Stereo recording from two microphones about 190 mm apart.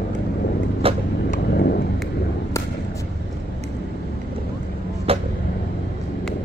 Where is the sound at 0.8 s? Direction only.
30° right (ahead or behind).